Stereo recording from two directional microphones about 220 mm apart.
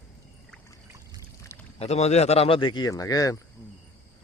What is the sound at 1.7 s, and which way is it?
Speech, 30° left (ahead or behind).